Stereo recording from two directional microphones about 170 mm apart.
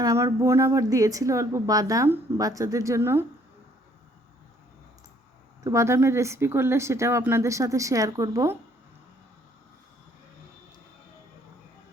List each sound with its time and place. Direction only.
0.0 s speech: 20° right (ahead or behind)
5.6 s speech: 15° right (ahead or behind)